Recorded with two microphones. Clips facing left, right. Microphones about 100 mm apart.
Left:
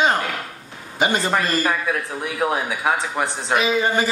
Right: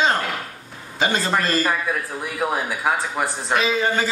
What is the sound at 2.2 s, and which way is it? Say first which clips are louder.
Speech: left 2 dB; centre (ahead or behind).